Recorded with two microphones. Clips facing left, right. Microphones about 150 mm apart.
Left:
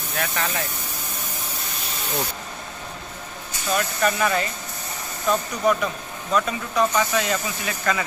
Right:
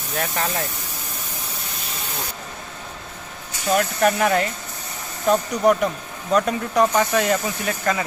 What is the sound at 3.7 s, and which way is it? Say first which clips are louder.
Speech: right 4 dB; 60° right (ahead or behind).